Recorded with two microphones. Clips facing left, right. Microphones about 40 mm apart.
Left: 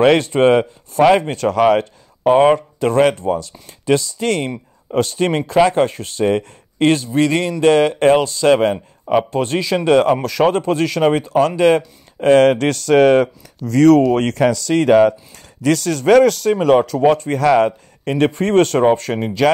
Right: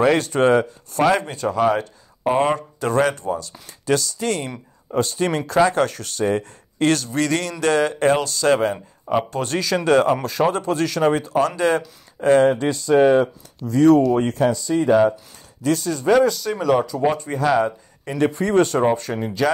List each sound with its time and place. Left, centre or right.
0.0 s speech: left
1.3 s speech: left
7.6 s speech: left
12.4 s speech: left
16.4 s speech: left
17.6 s speech: left
19.1 s speech: left